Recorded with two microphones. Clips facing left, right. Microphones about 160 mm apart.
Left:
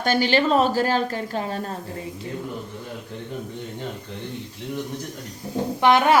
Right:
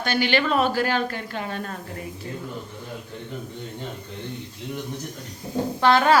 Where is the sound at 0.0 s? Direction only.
40° left (ahead or behind).